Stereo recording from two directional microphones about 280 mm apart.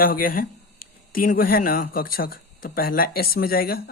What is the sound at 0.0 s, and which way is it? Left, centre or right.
Speech, left.